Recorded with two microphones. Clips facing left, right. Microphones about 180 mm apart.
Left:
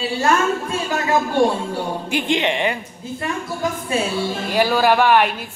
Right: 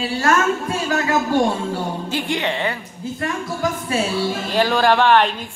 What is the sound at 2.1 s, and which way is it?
Speech, 20° left (ahead or behind).